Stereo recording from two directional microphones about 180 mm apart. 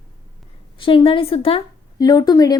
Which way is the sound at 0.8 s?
30° left (ahead or behind).